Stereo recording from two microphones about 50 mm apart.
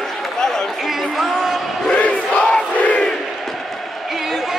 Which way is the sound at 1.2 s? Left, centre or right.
Centre.